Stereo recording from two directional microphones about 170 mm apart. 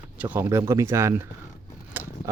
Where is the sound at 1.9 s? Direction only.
10° right (ahead or behind).